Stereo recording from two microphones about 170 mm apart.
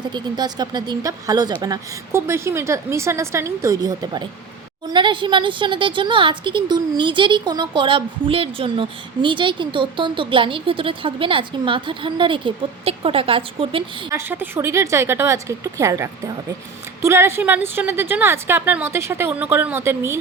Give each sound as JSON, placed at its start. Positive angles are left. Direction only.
{"t": 0.1, "sound": "a woman's voice", "side_deg": -25}
{"t": 14.1, "sound": "a woman's voice", "side_deg": -15}